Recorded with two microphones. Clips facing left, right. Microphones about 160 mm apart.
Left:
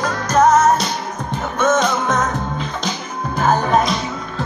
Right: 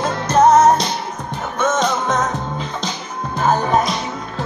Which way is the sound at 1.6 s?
5° left (ahead or behind).